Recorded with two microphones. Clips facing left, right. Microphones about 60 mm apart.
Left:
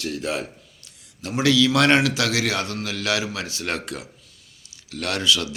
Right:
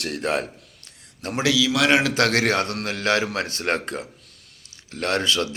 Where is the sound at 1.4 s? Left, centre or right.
Centre.